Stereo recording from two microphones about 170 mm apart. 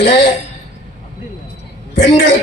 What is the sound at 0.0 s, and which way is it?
Speech, 90° left.